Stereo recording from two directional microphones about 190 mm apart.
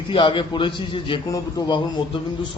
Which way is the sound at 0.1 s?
25° left (ahead or behind).